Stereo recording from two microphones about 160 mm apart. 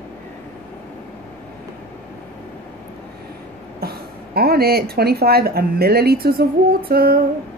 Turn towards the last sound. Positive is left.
turn(degrees=-70)  # may be behind; listen again after turning